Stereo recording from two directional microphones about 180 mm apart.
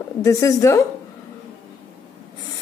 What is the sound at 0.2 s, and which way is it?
Speech, 15° left (ahead or behind).